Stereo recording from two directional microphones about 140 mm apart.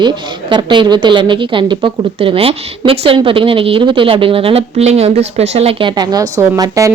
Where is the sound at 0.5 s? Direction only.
35° right (ahead or behind).